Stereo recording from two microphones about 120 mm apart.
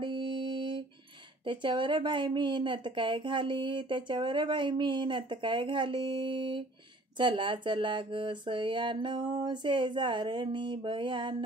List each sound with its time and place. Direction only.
0.0 s music: 40° right (ahead or behind)
1.4 s speech: 45° right (ahead or behind)